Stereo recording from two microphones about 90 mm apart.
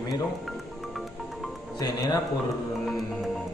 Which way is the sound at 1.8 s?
45° left (ahead or behind).